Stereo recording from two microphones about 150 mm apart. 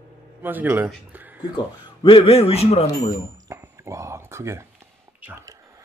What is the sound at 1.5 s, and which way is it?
Speech, 35° left (ahead or behind).